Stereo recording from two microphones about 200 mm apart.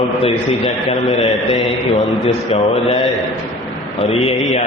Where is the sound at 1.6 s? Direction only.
Centre (ahead or behind).